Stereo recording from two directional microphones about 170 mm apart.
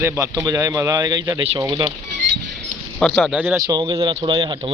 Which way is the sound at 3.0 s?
Centre (ahead or behind).